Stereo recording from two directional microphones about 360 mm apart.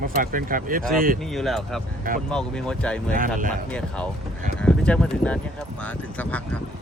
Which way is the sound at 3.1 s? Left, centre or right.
Right.